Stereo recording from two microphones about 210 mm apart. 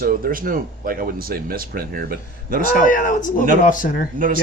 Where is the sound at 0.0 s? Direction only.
45° right (ahead or behind).